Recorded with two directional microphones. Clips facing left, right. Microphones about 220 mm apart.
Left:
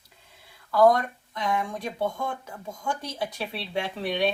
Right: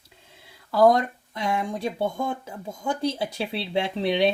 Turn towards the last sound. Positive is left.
turn(degrees=-25)  # may be behind; listen again after turning